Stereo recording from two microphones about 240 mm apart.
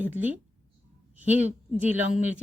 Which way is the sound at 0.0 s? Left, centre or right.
Centre.